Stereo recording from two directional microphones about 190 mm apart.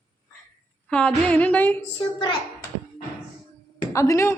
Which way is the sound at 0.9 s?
10° left (ahead or behind).